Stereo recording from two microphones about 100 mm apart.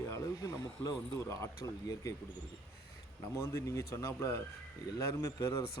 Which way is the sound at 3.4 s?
25° left (ahead or behind).